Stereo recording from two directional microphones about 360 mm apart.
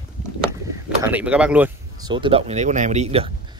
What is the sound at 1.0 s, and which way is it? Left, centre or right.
Speech, centre.